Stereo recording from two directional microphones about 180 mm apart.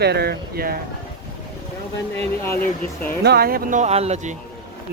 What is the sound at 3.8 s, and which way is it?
Speech, 35° right (ahead or behind).